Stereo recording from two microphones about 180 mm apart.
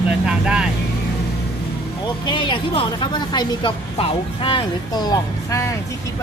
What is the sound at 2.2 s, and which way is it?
A woman's voice, 25° left (ahead or behind).